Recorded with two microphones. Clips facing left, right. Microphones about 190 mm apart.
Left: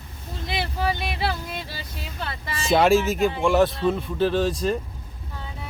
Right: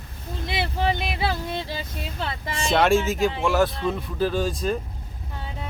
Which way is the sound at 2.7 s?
Centre (ahead or behind).